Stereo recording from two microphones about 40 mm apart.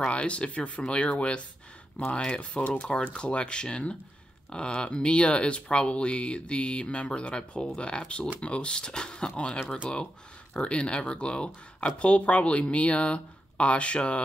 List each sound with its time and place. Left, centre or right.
0.0 s speech: left
2.1 s speech: left
10.5 s speech: left